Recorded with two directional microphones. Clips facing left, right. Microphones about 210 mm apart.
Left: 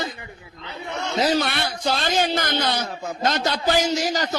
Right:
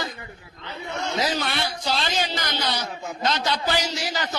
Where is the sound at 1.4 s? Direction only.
55° left (ahead or behind).